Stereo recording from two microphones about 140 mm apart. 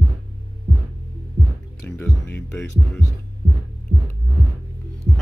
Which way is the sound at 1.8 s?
15° left (ahead or behind).